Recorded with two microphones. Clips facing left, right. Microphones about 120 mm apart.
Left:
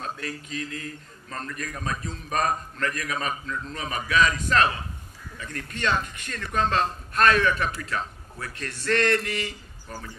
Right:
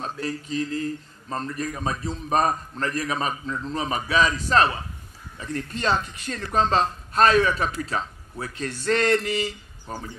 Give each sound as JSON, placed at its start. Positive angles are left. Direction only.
{"t": 0.0, "sound": "speech", "side_deg": -30}
{"t": 8.9, "sound": "mantra", "side_deg": -30}